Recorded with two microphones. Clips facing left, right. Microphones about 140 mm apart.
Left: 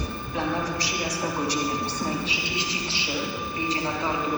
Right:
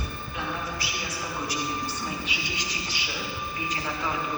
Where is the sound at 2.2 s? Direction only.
30° left (ahead or behind).